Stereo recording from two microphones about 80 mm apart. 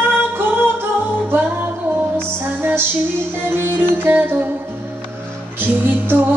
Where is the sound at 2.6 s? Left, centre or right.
Right.